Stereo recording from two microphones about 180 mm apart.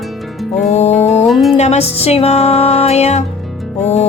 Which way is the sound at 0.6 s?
40° left (ahead or behind).